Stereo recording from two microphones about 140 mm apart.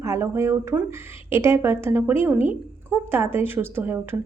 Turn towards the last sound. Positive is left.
turn(degrees=-15)  # may be behind; listen again after turning